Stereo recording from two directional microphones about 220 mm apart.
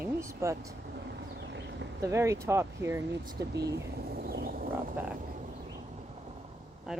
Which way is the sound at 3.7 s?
45° right (ahead or behind).